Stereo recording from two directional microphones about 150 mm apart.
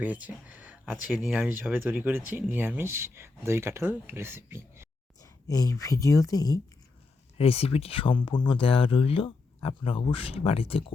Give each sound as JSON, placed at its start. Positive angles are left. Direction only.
{"t": 0.0, "sound": "speech", "side_deg": -10}
{"t": 5.2, "sound": "a woman's voice", "side_deg": 25}
{"t": 7.3, "sound": "speech", "side_deg": 40}